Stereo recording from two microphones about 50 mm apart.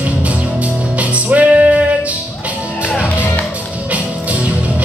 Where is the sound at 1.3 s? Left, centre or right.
Right.